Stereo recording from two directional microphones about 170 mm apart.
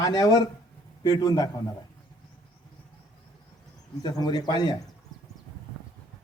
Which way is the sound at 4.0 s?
25° left (ahead or behind).